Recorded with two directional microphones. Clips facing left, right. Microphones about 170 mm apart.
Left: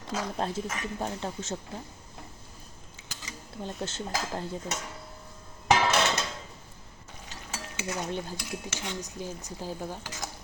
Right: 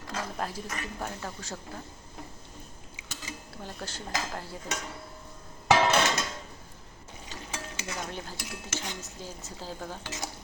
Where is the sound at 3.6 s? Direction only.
20° left (ahead or behind).